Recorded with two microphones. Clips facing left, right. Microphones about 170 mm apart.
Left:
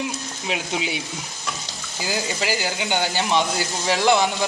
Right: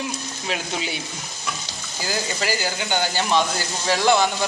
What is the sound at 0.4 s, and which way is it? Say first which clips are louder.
Speech: left 2 dB; 10° left (ahead or behind).